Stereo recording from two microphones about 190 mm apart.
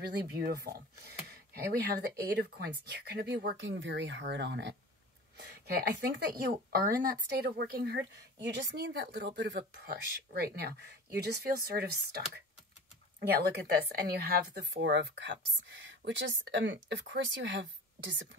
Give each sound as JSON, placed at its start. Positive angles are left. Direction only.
{"t": 0.7, "sound": "speech", "side_deg": -55}
{"t": 13.4, "sound": "speech", "side_deg": -55}
{"t": 15.7, "sound": "a sound", "side_deg": -70}
{"t": 16.0, "sound": "a woman's voice", "side_deg": -65}